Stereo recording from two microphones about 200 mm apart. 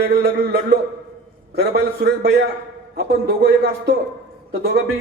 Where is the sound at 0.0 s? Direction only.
55° right (ahead or behind).